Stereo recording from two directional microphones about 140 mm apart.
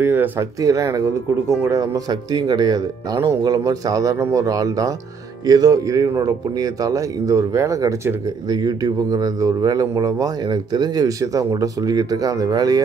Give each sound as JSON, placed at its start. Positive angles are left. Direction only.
{"t": 0.0, "sound": "speech", "side_deg": -15}